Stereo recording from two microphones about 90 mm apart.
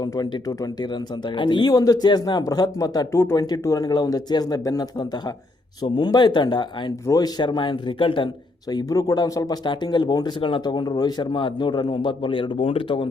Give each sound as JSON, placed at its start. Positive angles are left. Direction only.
{"t": 0.0, "sound": "speech", "side_deg": 45}
{"t": 2.4, "sound": "speech", "side_deg": 40}
{"t": 3.1, "sound": "speech", "side_deg": 30}
{"t": 3.3, "sound": "speech", "side_deg": 45}
{"t": 4.9, "sound": "a man's voice", "side_deg": 55}
{"t": 8.7, "sound": "speech", "side_deg": 45}
{"t": 9.6, "sound": "speech", "side_deg": 55}
{"t": 11.3, "sound": "speech", "side_deg": 70}